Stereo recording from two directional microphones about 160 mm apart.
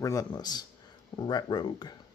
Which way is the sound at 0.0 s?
20° left (ahead or behind).